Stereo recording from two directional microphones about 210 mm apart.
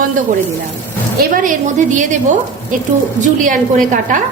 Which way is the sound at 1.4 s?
40° right (ahead or behind).